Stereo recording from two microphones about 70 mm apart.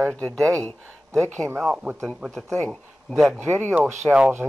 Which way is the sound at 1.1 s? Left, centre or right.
Centre.